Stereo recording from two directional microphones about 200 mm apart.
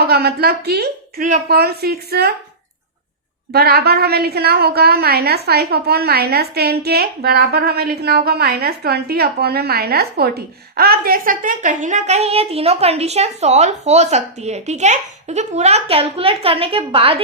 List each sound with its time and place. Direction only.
0.0 s a woman's voice: 50° right (ahead or behind)
3.5 s a woman's voice: 50° right (ahead or behind); by 17.2 s 30° right (ahead or behind)